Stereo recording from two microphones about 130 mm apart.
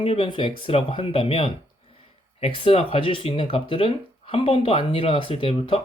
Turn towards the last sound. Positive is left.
turn(degrees=45)  # may be behind; listen again after turning